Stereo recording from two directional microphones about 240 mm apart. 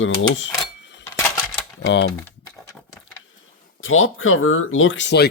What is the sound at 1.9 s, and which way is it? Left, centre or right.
Speech, left.